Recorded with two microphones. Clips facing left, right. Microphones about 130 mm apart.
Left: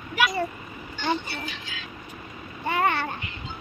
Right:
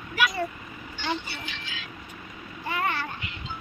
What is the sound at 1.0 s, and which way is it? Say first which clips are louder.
Speech: left 4 dB; 45° left (ahead or behind).